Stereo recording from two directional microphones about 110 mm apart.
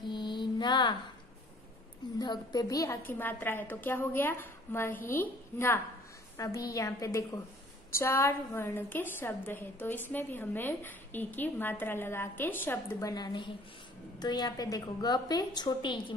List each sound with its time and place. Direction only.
0.0 s mantra: 45° left (ahead or behind)
2.1 s a woman's voice: 40° left (ahead or behind)
3.0 s a woman's voice: 20° left (ahead or behind)
6.3 s a woman's voice: 30° left (ahead or behind)
13.0 s a woman's voice: 40° left (ahead or behind)